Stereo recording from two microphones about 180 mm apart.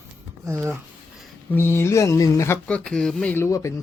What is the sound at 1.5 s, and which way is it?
Speech, 10° left (ahead or behind).